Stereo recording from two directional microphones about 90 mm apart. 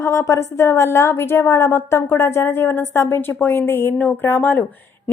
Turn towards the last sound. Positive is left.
turn(degrees=20)  # may be behind; listen again after turning